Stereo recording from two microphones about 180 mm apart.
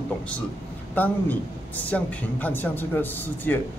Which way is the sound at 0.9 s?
10° left (ahead or behind).